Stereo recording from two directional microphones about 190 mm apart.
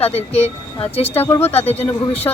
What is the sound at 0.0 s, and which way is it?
Speech, 35° left (ahead or behind).